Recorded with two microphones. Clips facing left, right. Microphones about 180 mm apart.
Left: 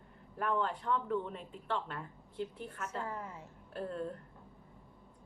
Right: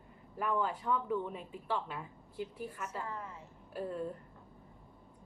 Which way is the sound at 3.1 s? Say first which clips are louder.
Left 1 dB; 25° left (ahead or behind).